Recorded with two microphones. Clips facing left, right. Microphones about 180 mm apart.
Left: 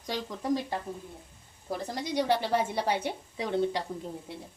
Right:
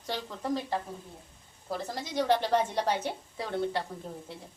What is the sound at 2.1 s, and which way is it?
A woman's voice, 10° left (ahead or behind).